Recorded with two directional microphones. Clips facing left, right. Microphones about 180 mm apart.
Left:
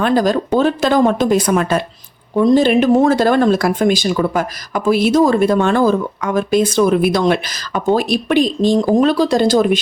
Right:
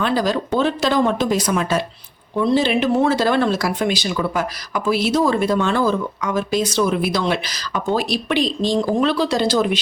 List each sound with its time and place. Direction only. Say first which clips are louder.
0.0 s speech: left 5 dB; 50° left (ahead or behind)
2.3 s speech: left 6 dB; 45° left (ahead or behind)